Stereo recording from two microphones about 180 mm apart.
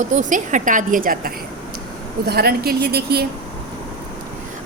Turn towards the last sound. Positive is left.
turn(degrees=-60)  # may be behind; listen again after turning